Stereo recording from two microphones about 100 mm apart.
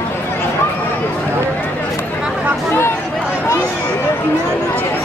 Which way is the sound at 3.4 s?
25° left (ahead or behind).